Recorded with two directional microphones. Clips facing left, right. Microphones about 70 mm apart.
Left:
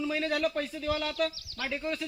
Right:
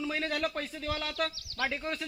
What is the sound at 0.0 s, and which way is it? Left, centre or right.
A man's voice, right.